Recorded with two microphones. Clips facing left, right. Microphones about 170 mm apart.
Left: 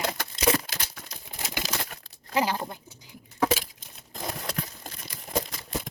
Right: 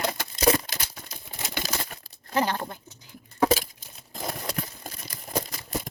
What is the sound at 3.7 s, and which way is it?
Crumpling, centre (ahead or behind).